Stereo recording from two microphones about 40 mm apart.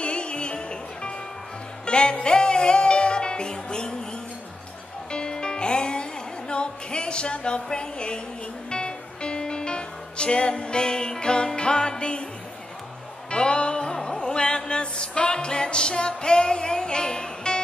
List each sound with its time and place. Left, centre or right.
0.0 s music: left
5.1 s music: left
13.3 s music: left